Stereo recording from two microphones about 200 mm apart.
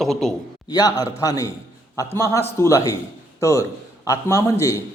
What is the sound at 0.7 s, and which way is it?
A man's voice, 20° left (ahead or behind).